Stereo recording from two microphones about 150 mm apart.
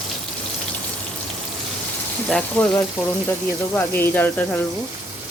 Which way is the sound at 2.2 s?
5° left (ahead or behind).